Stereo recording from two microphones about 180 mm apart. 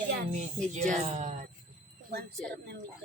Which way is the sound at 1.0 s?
40° right (ahead or behind).